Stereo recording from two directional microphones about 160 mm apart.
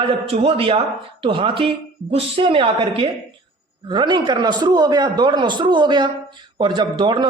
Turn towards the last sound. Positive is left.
turn(degrees=-30)  # may be behind; listen again after turning